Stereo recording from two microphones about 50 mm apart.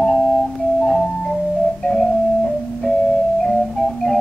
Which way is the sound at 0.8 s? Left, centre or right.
Centre.